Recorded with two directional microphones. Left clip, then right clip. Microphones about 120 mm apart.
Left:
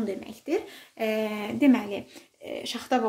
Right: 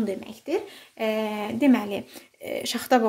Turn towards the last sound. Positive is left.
turn(degrees=-50)  # may be behind; listen again after turning